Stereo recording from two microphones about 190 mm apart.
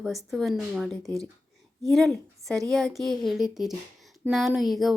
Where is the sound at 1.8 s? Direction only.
Centre (ahead or behind).